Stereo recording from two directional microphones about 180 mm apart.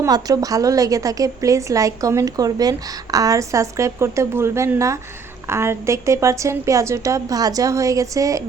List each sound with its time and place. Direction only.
0.0 s a woman's voice: 20° right (ahead or behind)